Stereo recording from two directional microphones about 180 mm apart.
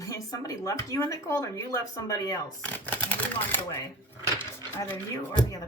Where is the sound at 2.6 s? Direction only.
10° left (ahead or behind).